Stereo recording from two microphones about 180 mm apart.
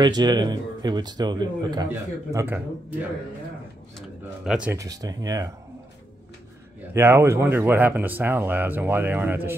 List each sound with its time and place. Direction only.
0.0 s speech: 25° right (ahead or behind)
1.9 s speech: 10° right (ahead or behind)
4.5 s speech: 5° right (ahead or behind)
4.7 s speech: 20° right (ahead or behind)
6.9 s speech: 15° right (ahead or behind)